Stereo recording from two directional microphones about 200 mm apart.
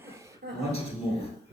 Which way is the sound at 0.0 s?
15° right (ahead or behind).